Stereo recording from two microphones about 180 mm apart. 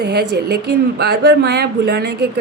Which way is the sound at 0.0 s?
65° right (ahead or behind).